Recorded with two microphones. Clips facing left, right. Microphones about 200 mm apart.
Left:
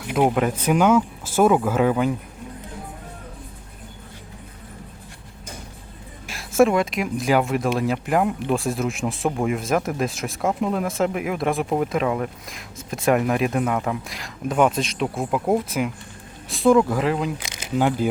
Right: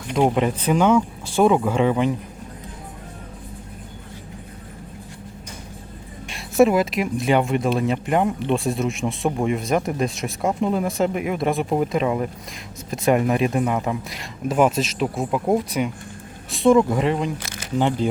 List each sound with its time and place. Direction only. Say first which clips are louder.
0.1 s speech: right 1 dB; 5° left (ahead or behind)
6.2 s speech: right 1 dB; centre (ahead or behind)
17.4 s a sound: right 1 dB; 15° left (ahead or behind)
17.7 s speech: even; 5° left (ahead or behind)